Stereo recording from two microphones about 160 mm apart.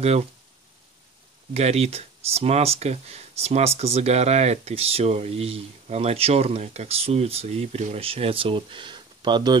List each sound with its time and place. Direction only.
0.0 s speech: 40° right (ahead or behind)
1.5 s speech: 40° right (ahead or behind)